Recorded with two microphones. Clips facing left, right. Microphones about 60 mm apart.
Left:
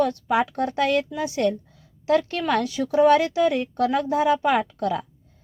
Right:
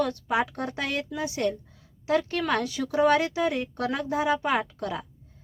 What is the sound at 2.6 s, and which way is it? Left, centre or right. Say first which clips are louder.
Speech: left 5 dB; left.